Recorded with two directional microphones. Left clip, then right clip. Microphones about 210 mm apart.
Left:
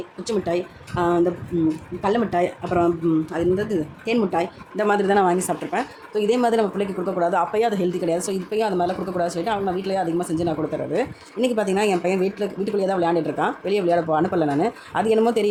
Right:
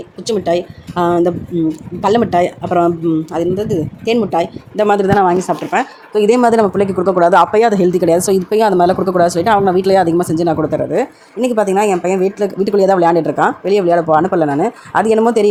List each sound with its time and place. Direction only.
0.3 s speech: 25° right (ahead or behind)
5.0 s a woman's voice: centre (ahead or behind)
6.1 s speech: 30° right (ahead or behind)
11.3 s speech: 20° right (ahead or behind)
12.6 s speech: 30° right (ahead or behind)